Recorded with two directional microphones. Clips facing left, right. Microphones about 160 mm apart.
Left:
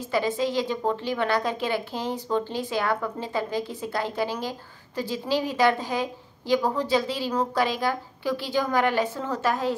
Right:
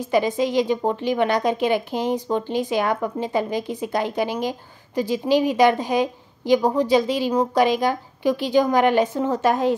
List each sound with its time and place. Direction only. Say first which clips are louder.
0.1 s a woman's voice: right 5 dB; 15° right (ahead or behind)